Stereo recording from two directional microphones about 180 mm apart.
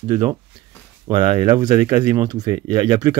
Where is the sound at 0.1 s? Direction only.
25° right (ahead or behind).